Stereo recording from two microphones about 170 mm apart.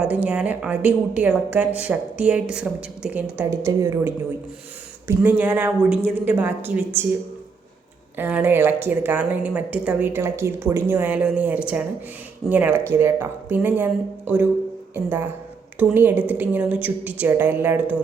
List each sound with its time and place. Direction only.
0.0 s a woman's voice: 10° right (ahead or behind)
8.1 s a woman's voice: 10° right (ahead or behind)